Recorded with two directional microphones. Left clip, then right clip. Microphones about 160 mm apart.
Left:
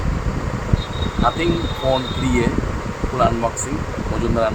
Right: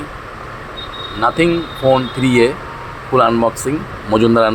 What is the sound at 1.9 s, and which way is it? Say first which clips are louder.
Speech: right 7 dB; 35° right (ahead or behind).